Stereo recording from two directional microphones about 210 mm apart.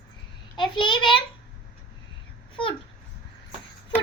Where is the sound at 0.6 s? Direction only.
25° left (ahead or behind).